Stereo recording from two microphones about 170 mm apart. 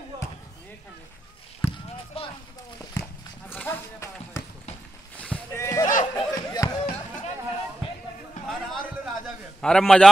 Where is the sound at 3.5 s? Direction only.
10° left (ahead or behind).